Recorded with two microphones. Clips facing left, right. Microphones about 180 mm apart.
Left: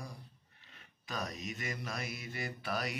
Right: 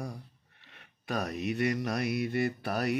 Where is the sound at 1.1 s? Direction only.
65° right (ahead or behind).